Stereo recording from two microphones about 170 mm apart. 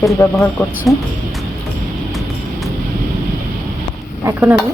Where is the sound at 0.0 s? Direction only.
15° left (ahead or behind).